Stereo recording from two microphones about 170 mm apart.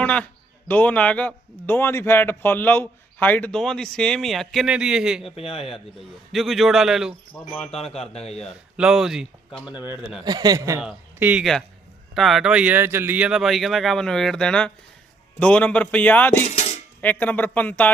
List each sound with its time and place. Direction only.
0.0 s a man's voice: 10° left (ahead or behind)
5.4 s speech: 35° left (ahead or behind)
5.7 s speech: centre (ahead or behind)
8.1 s speech: 40° left (ahead or behind)
8.4 s speech: 5° right (ahead or behind)
10.2 s speech: 20° right (ahead or behind)
10.8 s a man's voice: 5° right (ahead or behind); by 16.4 s 10° left (ahead or behind)
16.5 s cutlery: 40° left (ahead or behind)
17.0 s a man's voice: 10° left (ahead or behind)